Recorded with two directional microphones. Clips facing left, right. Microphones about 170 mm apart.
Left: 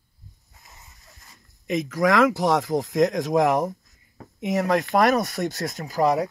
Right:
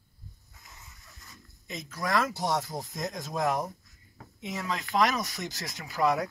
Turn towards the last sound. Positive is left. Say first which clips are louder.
# left 6 dB
turn(degrees=40)  # may be behind; listen again after turning